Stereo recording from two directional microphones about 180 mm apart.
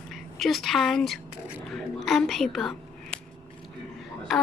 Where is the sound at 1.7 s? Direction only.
Centre (ahead or behind).